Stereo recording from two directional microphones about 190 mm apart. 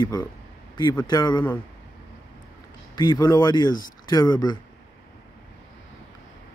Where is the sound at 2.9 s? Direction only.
20° left (ahead or behind).